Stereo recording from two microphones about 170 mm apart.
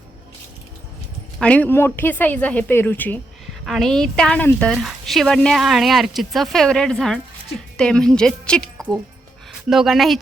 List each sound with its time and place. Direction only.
1.4 s a woman's voice: 10° left (ahead or behind)